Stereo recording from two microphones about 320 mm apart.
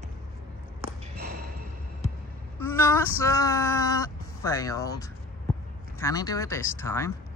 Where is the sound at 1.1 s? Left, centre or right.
Right.